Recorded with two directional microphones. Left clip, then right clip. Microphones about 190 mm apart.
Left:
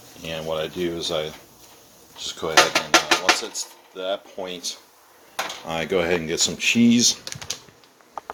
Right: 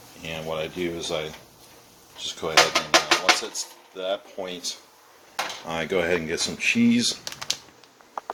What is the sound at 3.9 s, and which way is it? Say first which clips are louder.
Speech: left 1 dB; 15° left (ahead or behind).